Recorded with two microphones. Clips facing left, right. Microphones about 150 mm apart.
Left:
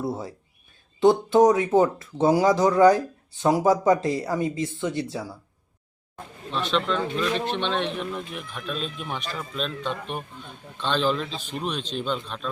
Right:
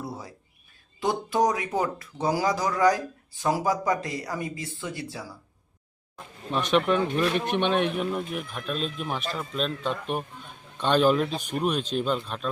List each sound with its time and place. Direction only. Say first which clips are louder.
0.0 s a sound: left 7 dB; 25° left (ahead or behind)
0.9 s speech: left 8 dB; 25° left (ahead or behind)
6.5 s speech: right 2 dB; 15° right (ahead or behind)